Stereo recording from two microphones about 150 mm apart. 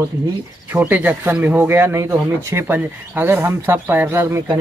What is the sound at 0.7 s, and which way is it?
Speech, 10° right (ahead or behind).